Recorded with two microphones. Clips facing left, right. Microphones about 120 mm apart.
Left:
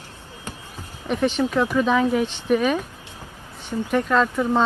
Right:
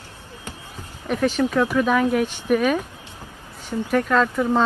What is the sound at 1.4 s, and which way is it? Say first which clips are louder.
Speech: right 1 dB; 10° left (ahead or behind).